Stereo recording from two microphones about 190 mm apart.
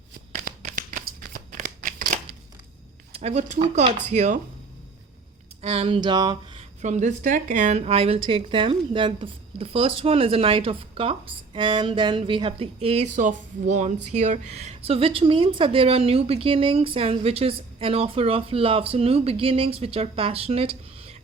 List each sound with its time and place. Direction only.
0.4 s a sound: 45° right (ahead or behind)
3.1 s speech: 35° right (ahead or behind)
5.6 s a woman's voice: 30° right (ahead or behind)
6.6 s a woman's voice: 40° right (ahead or behind)